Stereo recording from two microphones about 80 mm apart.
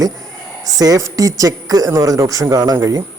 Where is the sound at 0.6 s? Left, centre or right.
Right.